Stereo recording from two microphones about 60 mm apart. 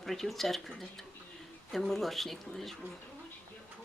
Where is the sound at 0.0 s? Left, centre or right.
Centre.